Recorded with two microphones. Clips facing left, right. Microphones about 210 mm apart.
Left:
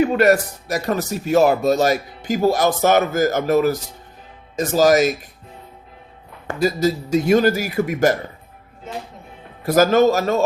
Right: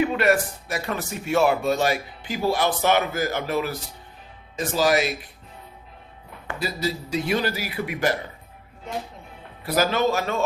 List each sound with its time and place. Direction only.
0.0 s speech: 40° left (ahead or behind)
6.5 s speech: 45° left (ahead or behind)
8.9 s music: centre (ahead or behind)
9.6 s speech: 45° left (ahead or behind)